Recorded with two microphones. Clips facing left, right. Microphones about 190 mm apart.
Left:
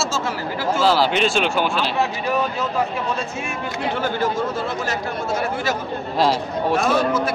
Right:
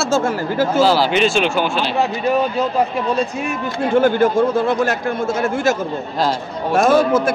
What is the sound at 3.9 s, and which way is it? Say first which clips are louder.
Speech: right 10 dB; 55° right (ahead or behind).